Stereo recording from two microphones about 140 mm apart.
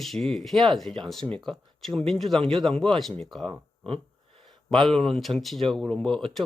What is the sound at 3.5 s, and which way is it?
Speech, 40° right (ahead or behind).